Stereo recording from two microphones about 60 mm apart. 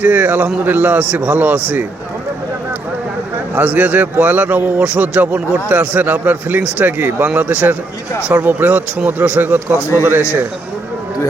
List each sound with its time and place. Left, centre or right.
0.0 s a man's voice: right
3.5 s a man's voice: right